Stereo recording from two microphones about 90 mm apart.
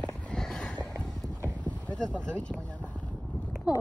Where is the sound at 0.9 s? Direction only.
35° right (ahead or behind).